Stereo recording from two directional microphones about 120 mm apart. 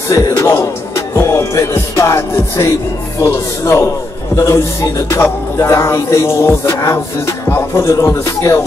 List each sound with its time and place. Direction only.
0.1 s music: 25° left (ahead or behind)